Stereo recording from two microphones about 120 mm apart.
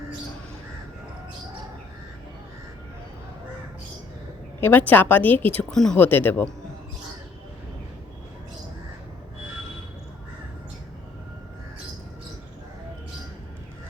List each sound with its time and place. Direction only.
4.6 s a woman's voice: 15° left (ahead or behind)
5.5 s speech: 5° left (ahead or behind)
6.0 s a woman's voice: 15° left (ahead or behind)